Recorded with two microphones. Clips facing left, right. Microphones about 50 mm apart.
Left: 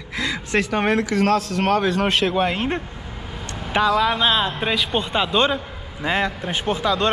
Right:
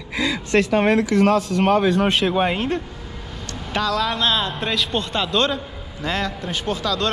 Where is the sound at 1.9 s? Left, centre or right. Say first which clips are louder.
Right 1 dB; left.